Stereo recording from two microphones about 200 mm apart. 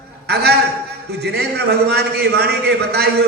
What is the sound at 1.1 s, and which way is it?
A man's voice, 55° right (ahead or behind).